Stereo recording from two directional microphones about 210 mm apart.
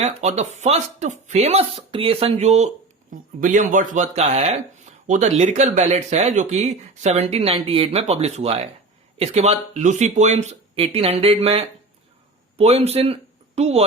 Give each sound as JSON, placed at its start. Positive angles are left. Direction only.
{"t": 0.0, "sound": "speech", "side_deg": -30}